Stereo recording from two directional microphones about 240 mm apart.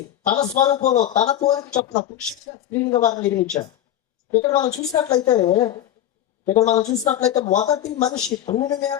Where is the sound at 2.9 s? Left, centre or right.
Left.